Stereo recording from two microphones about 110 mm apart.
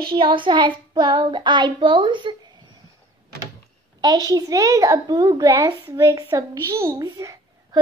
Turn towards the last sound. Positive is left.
turn(degrees=-35)  # may be behind; listen again after turning